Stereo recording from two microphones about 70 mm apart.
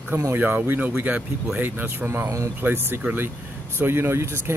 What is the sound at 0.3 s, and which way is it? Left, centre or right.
Speech, right.